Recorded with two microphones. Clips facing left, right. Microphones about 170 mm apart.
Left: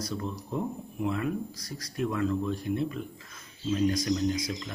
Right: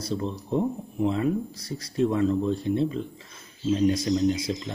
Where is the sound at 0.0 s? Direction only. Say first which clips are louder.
Right 5 dB; 25° right (ahead or behind).